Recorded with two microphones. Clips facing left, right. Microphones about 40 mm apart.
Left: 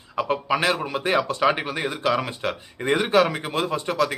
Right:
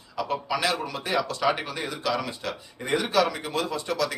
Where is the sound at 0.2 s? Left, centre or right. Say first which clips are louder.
Left 4 dB; left.